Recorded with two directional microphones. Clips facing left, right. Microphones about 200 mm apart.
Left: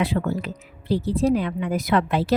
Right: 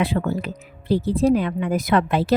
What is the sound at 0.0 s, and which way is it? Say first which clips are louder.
A woman's voice: right 1 dB; 55° right (ahead or behind).